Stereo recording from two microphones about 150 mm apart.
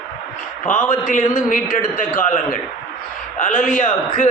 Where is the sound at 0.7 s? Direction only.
60° left (ahead or behind).